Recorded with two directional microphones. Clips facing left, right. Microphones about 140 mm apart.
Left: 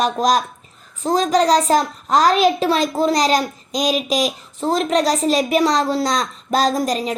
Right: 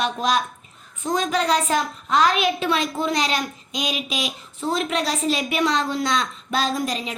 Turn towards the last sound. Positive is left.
turn(degrees=40)  # may be behind; listen again after turning